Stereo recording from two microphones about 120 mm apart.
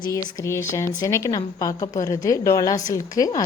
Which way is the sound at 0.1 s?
25° left (ahead or behind).